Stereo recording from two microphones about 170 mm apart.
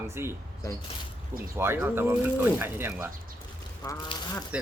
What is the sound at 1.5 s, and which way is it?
Speech, 10° right (ahead or behind).